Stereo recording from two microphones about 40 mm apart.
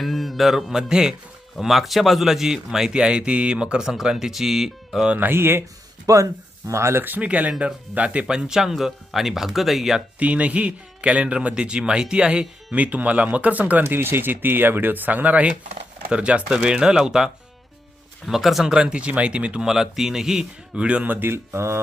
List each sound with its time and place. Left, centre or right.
0.0 s music: centre
1.5 s speech: centre
5.3 s speech: right
7.2 s speech: right
8.3 s speech: centre
10.2 s a man's voice: right
12.7 s speech: right
13.8 s speech: right
16.1 s a man's voice: right; by 18.7 s centre
18.7 s a man's voice: right
19.6 s speech: centre
20.7 s a man's voice: right
21.0 s speech: right
21.2 s mantra: right